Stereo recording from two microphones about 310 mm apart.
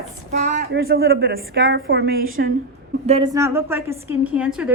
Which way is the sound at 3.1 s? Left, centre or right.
Centre.